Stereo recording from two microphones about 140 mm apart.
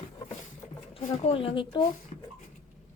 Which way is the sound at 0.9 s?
45° left (ahead or behind).